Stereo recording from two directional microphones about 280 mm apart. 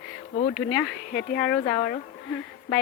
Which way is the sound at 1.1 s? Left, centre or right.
Left.